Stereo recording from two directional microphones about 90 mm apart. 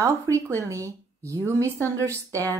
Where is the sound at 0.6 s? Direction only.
35° right (ahead or behind).